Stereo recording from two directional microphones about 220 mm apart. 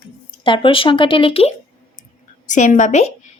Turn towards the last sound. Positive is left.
turn(degrees=30)  # may be behind; listen again after turning